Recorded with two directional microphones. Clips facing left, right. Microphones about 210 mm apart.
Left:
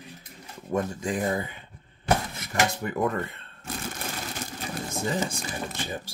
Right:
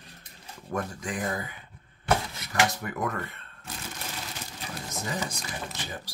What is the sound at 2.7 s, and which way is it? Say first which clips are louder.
Speech: left 5 dB; 25° left (ahead or behind).